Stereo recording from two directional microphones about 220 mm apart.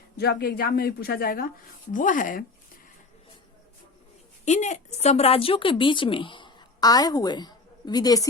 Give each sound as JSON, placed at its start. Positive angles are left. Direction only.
{"t": 0.2, "sound": "speech", "side_deg": 45}
{"t": 4.4, "sound": "speech", "side_deg": 30}